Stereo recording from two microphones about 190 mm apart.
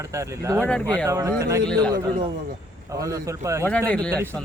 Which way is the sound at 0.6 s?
5° left (ahead or behind).